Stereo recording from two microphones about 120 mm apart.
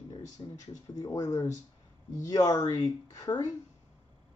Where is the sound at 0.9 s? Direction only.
30° left (ahead or behind).